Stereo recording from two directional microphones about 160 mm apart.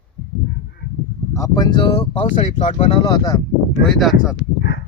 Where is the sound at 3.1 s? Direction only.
25° left (ahead or behind).